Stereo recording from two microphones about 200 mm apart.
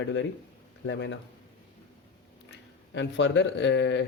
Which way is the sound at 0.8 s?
65° left (ahead or behind).